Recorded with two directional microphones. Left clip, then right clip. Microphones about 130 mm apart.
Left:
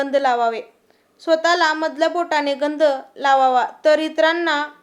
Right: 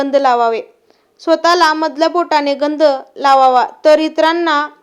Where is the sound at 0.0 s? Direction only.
30° right (ahead or behind).